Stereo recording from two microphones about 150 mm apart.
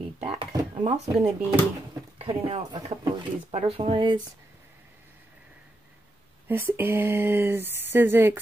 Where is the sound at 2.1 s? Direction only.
40° right (ahead or behind).